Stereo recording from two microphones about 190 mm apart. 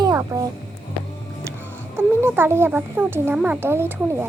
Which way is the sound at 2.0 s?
10° right (ahead or behind).